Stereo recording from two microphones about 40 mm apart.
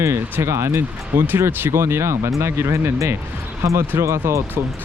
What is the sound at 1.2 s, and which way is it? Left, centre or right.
Speech, right.